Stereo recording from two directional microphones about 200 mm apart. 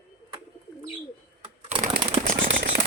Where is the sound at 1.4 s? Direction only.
25° right (ahead or behind).